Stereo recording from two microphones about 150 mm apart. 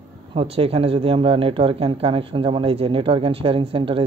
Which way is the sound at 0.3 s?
40° right (ahead or behind).